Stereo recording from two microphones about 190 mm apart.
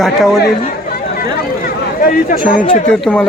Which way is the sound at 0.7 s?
50° left (ahead or behind).